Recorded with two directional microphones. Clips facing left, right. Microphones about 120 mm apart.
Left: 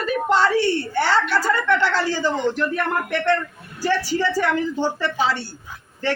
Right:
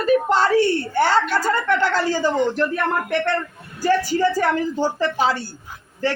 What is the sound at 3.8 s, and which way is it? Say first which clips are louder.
A woman's voice: right 3 dB; 45° right (ahead or behind).